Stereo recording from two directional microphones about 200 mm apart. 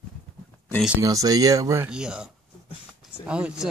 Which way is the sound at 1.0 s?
15° right (ahead or behind).